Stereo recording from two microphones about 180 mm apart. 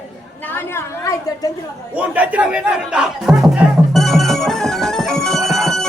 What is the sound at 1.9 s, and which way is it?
Music, 5° right (ahead or behind).